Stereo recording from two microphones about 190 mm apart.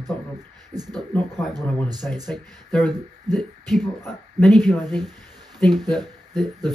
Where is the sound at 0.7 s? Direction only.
20° right (ahead or behind).